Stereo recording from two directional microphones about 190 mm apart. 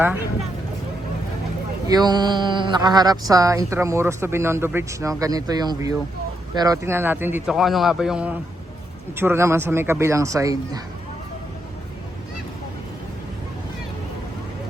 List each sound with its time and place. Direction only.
1.9 s speech: 20° right (ahead or behind)